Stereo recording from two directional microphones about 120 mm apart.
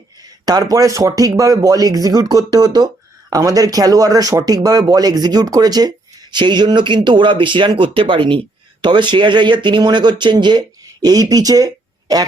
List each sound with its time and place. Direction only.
0.2 s speech: 35° right (ahead or behind)